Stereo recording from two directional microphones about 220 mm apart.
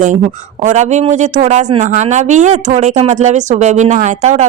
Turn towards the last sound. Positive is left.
turn(degrees=-30)  # may be behind; listen again after turning